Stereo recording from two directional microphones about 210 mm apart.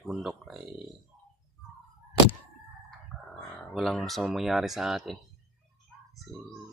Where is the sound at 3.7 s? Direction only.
Centre (ahead or behind).